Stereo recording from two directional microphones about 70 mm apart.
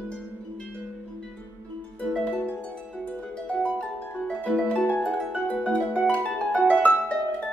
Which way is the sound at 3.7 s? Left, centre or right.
Centre.